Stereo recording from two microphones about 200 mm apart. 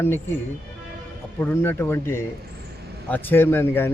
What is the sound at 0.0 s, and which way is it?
Speech, 10° left (ahead or behind).